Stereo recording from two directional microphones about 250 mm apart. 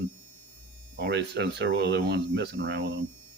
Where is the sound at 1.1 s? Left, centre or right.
Right.